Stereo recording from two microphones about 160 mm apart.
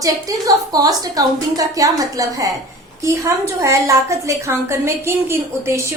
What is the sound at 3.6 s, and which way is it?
A woman's voice, 20° right (ahead or behind).